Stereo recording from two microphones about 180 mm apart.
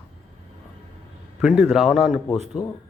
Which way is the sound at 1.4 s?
Centre (ahead or behind).